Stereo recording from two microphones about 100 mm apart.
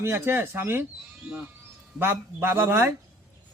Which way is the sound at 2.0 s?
20° right (ahead or behind).